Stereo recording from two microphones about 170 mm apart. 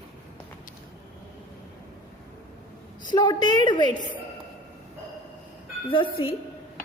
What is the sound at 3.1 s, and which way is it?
Speech, 25° left (ahead or behind).